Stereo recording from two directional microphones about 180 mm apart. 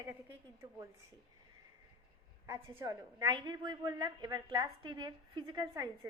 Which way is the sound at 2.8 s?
15° right (ahead or behind).